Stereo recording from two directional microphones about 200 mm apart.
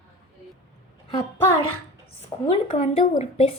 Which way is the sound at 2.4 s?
30° left (ahead or behind).